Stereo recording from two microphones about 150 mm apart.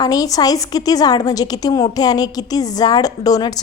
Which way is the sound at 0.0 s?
25° left (ahead or behind).